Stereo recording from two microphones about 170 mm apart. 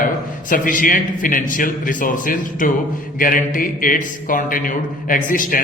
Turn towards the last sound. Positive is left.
turn(degrees=55)  # may be behind; listen again after turning